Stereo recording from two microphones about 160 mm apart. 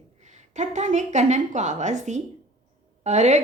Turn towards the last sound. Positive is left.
turn(degrees=-45)  # may be behind; listen again after turning